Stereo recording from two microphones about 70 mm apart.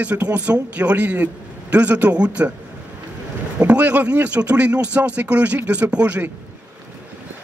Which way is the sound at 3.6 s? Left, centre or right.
Centre.